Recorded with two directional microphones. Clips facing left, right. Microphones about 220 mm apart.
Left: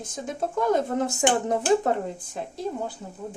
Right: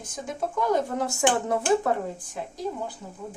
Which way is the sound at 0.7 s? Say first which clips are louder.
Left 2 dB; 20° left (ahead or behind).